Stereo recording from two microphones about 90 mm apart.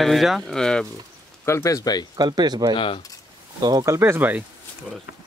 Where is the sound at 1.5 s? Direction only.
35° left (ahead or behind).